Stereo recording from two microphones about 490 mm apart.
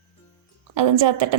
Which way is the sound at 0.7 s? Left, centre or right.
Right.